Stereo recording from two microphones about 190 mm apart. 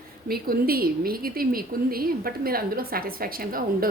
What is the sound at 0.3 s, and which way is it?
A woman's voice, 50° right (ahead or behind).